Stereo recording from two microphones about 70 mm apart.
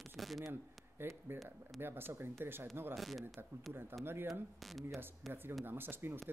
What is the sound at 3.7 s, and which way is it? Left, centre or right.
Speech, right.